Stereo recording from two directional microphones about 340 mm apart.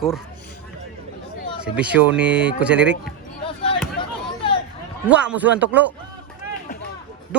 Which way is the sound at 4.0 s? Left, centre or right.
Centre.